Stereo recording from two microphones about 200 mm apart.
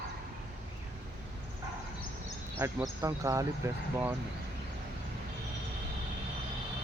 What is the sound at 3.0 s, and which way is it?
Speech, 15° right (ahead or behind).